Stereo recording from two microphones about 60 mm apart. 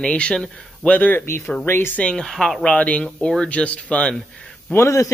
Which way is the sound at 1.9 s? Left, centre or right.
Centre.